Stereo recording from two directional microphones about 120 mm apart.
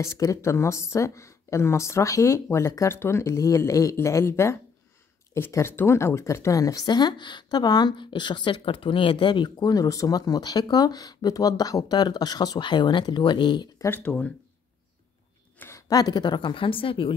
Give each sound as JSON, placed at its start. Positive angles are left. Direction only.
{"t": 0.0, "sound": "a woman's voice", "side_deg": 25}
{"t": 13.8, "sound": "speech", "side_deg": 15}
{"t": 15.9, "sound": "a woman's voice", "side_deg": 35}